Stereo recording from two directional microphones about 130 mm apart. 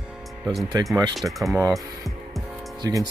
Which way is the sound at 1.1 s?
Centre (ahead or behind).